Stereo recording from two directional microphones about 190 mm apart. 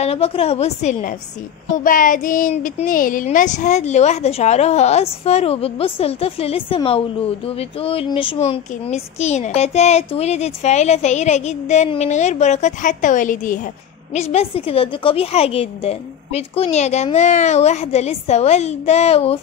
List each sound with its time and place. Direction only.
0.0 s speech: 30° left (ahead or behind)